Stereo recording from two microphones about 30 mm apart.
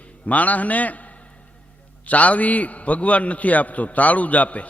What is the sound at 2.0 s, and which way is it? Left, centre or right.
A man's voice, left.